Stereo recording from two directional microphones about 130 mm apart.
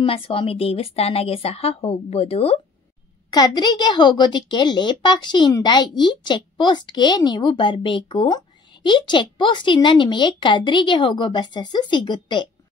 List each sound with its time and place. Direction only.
0.0 s a woman's voice: 45° left (ahead or behind)
3.3 s a woman's voice: 30° left (ahead or behind)